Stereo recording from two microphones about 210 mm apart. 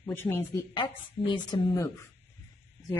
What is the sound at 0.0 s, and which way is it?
Speech, 10° left (ahead or behind).